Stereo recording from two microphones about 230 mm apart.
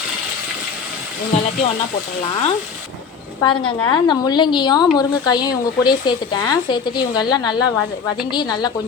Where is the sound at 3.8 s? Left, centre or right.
Centre.